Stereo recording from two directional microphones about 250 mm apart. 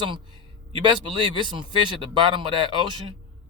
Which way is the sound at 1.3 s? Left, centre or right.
Centre.